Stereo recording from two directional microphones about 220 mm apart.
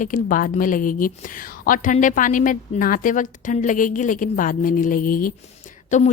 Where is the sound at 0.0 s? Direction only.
40° left (ahead or behind).